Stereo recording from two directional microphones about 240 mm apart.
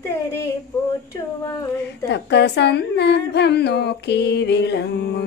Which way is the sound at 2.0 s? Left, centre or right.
Left.